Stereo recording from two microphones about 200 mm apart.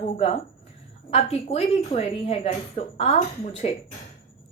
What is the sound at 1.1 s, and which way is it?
A woman's voice, 30° left (ahead or behind).